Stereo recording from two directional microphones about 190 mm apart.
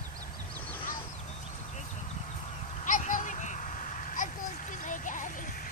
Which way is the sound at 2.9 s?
45° left (ahead or behind).